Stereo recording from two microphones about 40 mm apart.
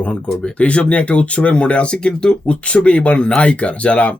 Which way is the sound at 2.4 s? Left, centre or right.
Left.